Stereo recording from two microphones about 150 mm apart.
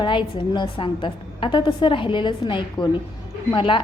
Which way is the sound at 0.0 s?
30° left (ahead or behind).